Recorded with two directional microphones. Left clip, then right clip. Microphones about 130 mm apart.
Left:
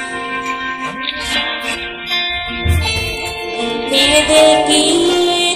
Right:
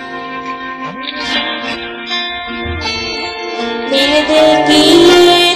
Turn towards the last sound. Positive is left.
turn(degrees=0)  # may be behind; listen again after turning